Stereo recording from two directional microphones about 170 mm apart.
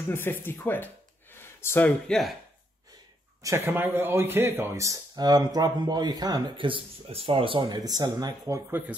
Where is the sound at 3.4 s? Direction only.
15° right (ahead or behind).